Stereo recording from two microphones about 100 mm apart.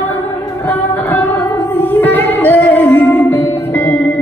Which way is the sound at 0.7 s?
20° left (ahead or behind).